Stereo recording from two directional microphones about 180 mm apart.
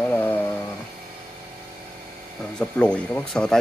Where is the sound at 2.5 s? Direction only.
5° left (ahead or behind).